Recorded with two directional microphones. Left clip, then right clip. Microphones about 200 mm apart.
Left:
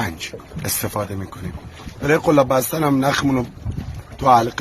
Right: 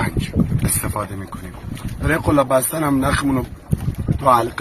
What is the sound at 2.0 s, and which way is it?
Speech, 55° left (ahead or behind).